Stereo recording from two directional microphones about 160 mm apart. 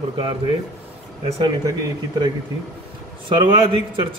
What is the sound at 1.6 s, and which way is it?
Speech, 25° right (ahead or behind).